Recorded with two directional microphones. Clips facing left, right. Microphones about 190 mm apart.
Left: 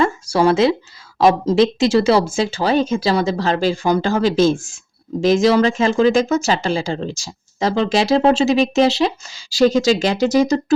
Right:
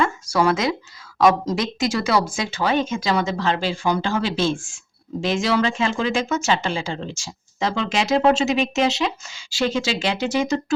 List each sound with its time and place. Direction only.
0.0 s speech: 30° left (ahead or behind)